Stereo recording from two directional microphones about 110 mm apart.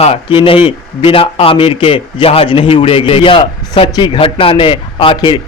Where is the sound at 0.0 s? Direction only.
60° left (ahead or behind).